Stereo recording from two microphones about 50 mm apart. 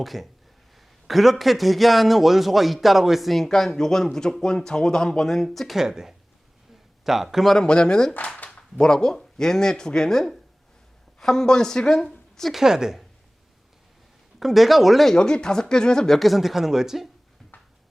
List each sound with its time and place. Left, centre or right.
0.0 s a man's voice: centre
7.5 s speech: centre
12.5 s a man's voice: centre
14.3 s a man's voice: centre
15.1 s speech: centre
16.1 s a man's voice: centre
17.5 s a sound: left